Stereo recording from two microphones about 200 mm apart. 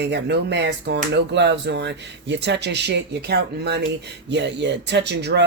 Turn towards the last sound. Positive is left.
turn(degrees=-60)  # may be behind; listen again after turning